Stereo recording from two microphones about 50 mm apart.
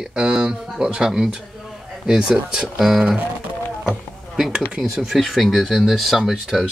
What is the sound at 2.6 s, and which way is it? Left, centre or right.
Speech, centre.